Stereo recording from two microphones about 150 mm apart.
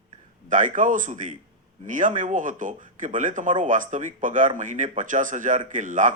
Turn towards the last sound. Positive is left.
turn(degrees=-55)  # may be behind; listen again after turning